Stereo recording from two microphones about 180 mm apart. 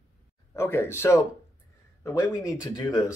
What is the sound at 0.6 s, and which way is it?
Speech, 15° left (ahead or behind).